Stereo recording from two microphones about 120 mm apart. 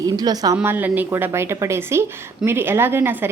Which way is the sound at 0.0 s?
30° right (ahead or behind).